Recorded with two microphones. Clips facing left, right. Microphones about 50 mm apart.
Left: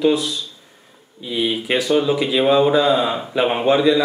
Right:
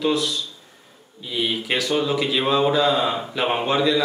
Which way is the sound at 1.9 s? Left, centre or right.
Centre.